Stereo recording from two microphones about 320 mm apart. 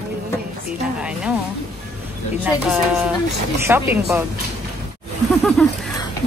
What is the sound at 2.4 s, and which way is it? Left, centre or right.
Speech, centre.